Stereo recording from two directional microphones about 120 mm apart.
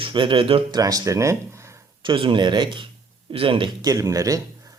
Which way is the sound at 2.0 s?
45° right (ahead or behind).